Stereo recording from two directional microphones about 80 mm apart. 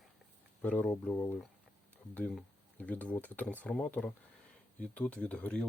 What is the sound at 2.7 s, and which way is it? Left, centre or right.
Speech, centre.